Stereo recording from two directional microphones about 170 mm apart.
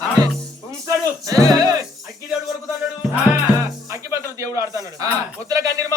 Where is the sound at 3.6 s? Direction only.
20° right (ahead or behind).